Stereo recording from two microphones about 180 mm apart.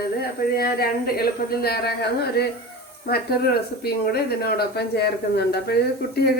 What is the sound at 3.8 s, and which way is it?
Speech, 60° left (ahead or behind).